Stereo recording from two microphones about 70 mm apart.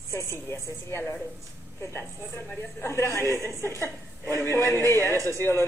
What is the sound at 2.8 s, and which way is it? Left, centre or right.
A woman's voice, left.